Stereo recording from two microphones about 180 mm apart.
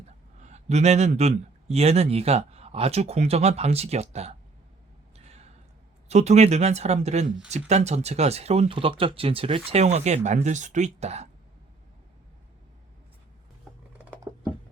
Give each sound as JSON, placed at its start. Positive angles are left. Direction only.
{"t": 0.4, "sound": "speech", "side_deg": -40}
{"t": 5.1, "sound": "a sound", "side_deg": -35}
{"t": 6.1, "sound": "speech", "side_deg": -40}